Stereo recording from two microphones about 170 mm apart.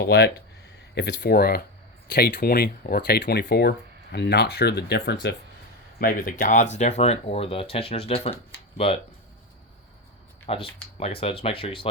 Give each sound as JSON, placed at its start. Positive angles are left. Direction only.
{"t": 0.0, "sound": "speech", "side_deg": 75}
{"t": 6.0, "sound": "speech", "side_deg": 55}
{"t": 10.4, "sound": "speech", "side_deg": 35}